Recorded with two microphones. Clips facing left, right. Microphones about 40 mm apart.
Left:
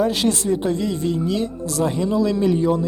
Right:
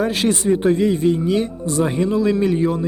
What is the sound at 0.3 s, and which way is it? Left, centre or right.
Speech, centre.